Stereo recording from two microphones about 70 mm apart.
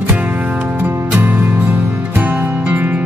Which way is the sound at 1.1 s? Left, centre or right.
Right.